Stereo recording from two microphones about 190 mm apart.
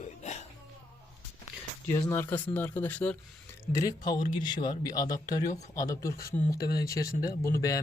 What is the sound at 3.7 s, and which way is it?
Speech, 20° left (ahead or behind).